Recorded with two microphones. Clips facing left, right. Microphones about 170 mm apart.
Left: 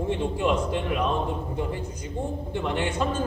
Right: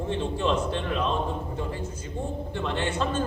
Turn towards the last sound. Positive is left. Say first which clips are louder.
# left 1 dB
turn(degrees=10)  # may be behind; listen again after turning